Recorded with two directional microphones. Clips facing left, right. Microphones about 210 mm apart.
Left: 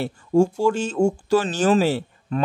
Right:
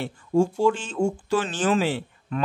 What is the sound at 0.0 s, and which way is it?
Speech, 40° left (ahead or behind).